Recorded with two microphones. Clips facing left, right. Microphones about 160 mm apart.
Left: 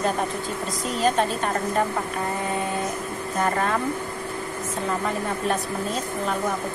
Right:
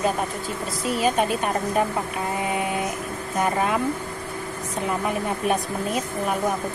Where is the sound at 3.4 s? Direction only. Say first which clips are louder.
Right 1 dB; 10° right (ahead or behind).